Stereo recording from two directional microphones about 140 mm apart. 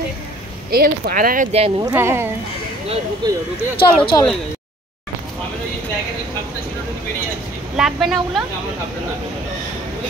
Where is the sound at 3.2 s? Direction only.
30° right (ahead or behind).